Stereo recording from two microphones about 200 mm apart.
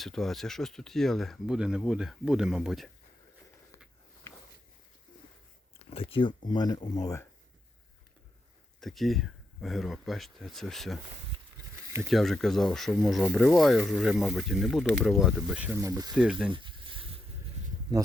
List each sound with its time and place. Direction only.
0.0 s speech: centre (ahead or behind)
4.3 s walk: 15° left (ahead or behind)
5.9 s speech: 30° left (ahead or behind)
8.8 s speech: centre (ahead or behind)
12.0 s speech: centre (ahead or behind); by 16.1 s 15° right (ahead or behind)
16.1 s speech: 5° right (ahead or behind)
16.5 s a sound: 25° right (ahead or behind)